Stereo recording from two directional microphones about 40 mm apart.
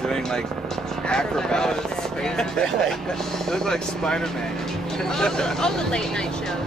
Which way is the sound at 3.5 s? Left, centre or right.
Centre.